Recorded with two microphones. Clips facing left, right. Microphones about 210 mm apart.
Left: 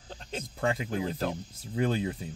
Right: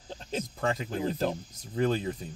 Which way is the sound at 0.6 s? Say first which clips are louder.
Left 2 dB; 10° left (ahead or behind).